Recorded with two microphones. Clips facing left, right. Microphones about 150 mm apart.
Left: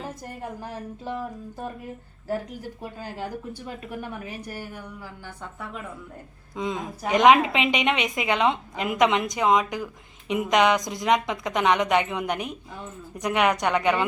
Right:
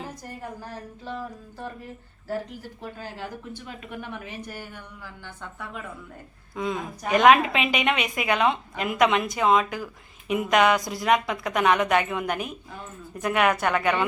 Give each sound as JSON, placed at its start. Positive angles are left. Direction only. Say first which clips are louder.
{"t": 0.6, "sound": "speech", "louder": "left 3 dB", "side_deg": 15}
{"t": 2.8, "sound": "speech", "louder": "left 1 dB", "side_deg": 10}
{"t": 5.0, "sound": "a sound", "louder": "left 1 dB", "side_deg": 35}
{"t": 6.6, "sound": "a woman's voice", "louder": "even", "side_deg": 20}